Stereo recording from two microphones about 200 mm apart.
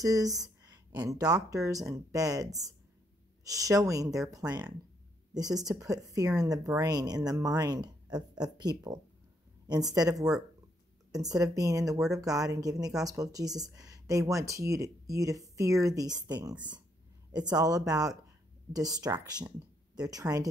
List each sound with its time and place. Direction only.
0.0 s speech: 15° right (ahead or behind)